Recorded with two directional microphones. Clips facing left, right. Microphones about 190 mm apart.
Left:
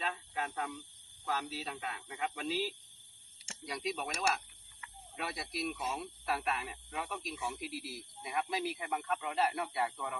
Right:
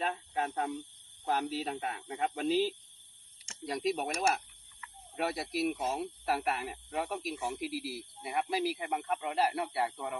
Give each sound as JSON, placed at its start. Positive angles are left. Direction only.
{"t": 0.0, "sound": "a sound", "side_deg": -40}
{"t": 1.3, "sound": "speech", "side_deg": -45}
{"t": 3.7, "sound": "speech", "side_deg": -40}
{"t": 7.6, "sound": "speech", "side_deg": -10}
{"t": 8.2, "sound": "speech", "side_deg": -35}